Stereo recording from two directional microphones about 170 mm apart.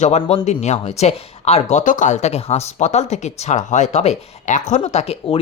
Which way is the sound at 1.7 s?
50° left (ahead or behind).